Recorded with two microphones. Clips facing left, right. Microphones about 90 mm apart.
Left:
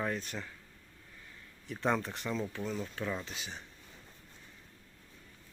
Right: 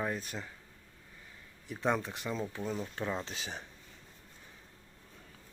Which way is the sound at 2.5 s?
20° right (ahead or behind).